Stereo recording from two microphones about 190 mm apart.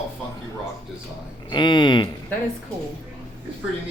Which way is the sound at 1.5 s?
25° left (ahead or behind).